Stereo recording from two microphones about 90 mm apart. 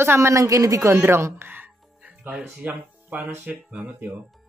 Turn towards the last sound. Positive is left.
turn(degrees=-20)  # may be behind; listen again after turning